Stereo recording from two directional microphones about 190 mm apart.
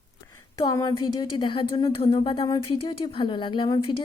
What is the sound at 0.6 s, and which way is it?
A woman's voice, 20° left (ahead or behind).